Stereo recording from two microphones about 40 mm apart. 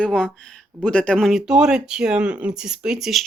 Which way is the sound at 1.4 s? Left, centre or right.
Centre.